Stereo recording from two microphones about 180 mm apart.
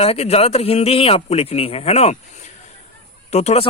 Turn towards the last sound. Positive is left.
turn(degrees=35)  # may be behind; listen again after turning